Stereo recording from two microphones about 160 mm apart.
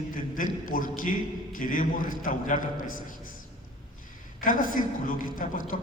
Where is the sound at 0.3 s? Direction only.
55° left (ahead or behind).